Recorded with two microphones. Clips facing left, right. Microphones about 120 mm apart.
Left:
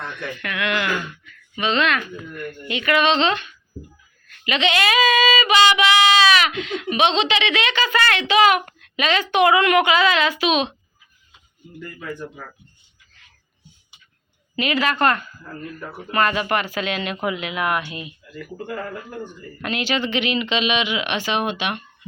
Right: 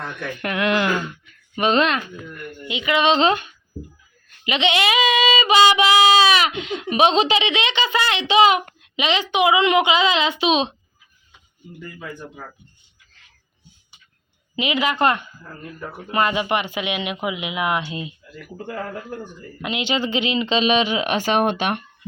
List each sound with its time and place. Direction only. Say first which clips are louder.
0.4 s speech: right 4 dB; 35° right (ahead or behind)
1.5 s speech: right 2 dB; 45° right (ahead or behind)
2.6 s female singing: even; 15° right (ahead or behind)
14.5 s female singing: even; 20° right (ahead or behind)
19.6 s speech: even; 20° right (ahead or behind); by 21.8 s 45° right (ahead or behind)